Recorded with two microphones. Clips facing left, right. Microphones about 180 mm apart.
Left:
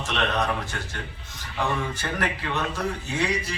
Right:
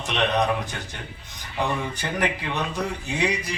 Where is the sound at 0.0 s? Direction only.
15° right (ahead or behind).